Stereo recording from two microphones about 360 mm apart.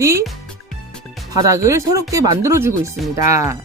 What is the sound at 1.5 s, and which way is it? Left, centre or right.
Speech, centre.